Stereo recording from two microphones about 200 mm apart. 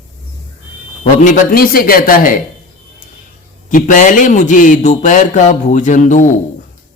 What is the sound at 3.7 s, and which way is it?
A man's voice, 40° left (ahead or behind).